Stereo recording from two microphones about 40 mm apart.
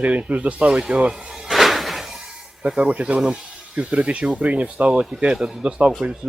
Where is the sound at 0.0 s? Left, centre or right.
Right.